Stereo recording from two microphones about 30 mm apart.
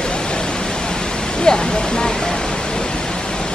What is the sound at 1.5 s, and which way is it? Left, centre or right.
Speech, left.